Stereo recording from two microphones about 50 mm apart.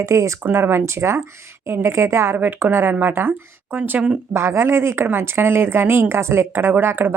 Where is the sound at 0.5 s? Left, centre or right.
Right.